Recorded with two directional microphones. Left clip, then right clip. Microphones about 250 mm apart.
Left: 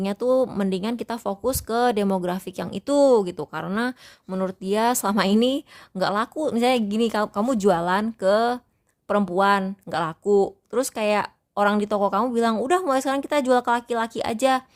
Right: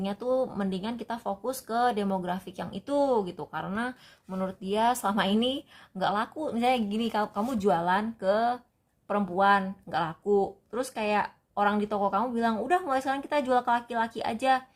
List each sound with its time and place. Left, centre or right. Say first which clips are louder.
0.0 s speech: left 7 dB; left